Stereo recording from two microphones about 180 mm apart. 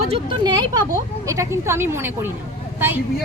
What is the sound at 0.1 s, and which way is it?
A woman's voice, 25° right (ahead or behind).